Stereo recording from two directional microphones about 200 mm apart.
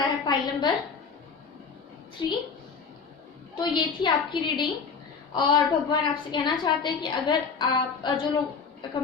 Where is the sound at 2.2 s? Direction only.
20° left (ahead or behind).